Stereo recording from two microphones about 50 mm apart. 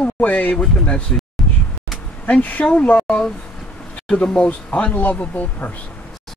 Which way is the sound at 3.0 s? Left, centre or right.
Centre.